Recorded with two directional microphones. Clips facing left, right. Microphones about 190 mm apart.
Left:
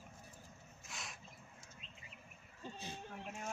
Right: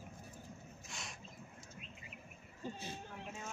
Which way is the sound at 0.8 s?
Centre (ahead or behind).